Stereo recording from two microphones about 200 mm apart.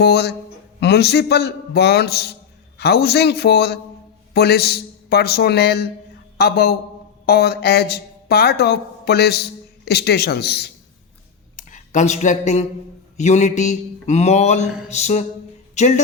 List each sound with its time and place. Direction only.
0.0 s a man's voice: 55° left (ahead or behind)
11.5 s speech: 40° left (ahead or behind)
13.1 s mantra: 35° left (ahead or behind)
15.7 s a woman's voice: 35° left (ahead or behind)